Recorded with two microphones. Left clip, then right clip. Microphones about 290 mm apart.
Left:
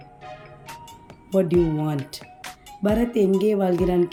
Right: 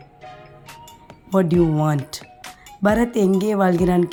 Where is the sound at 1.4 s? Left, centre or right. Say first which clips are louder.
Right 1 dB; centre.